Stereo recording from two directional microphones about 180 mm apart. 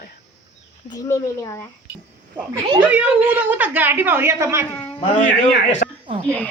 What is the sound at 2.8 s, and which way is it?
A woman's voice, 10° right (ahead or behind).